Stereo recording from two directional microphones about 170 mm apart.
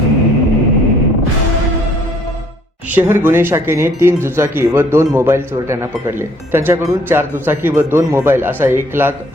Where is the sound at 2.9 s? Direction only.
10° right (ahead or behind).